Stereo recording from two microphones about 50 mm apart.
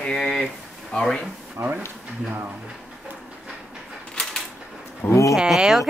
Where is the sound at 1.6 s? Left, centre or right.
Right.